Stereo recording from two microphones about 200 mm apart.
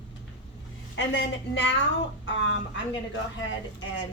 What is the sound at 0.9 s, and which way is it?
A woman's voice, 60° left (ahead or behind).